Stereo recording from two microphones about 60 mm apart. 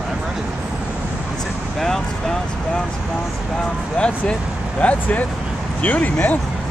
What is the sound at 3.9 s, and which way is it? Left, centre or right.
Speech, centre.